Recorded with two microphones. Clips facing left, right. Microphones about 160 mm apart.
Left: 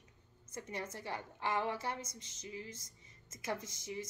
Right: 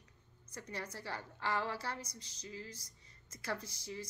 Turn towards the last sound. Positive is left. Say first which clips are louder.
# left 2 dB
turn(degrees=20)  # may be behind; listen again after turning